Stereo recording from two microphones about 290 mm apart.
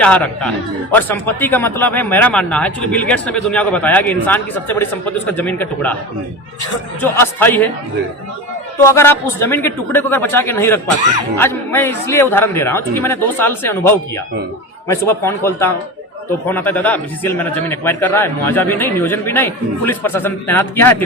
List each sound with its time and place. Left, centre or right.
0.0 s speech: centre
7.0 s a man's voice: centre
9.0 s a man's voice: centre